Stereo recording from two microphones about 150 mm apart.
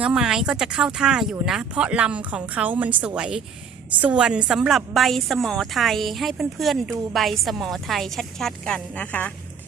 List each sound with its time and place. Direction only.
0.0 s a woman's voice: 5° right (ahead or behind)